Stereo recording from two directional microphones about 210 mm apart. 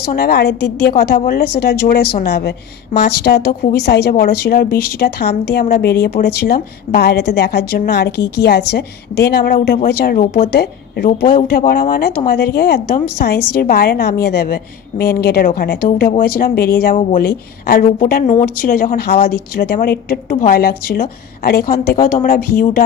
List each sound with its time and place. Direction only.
0.1 s a woman's voice: 50° left (ahead or behind)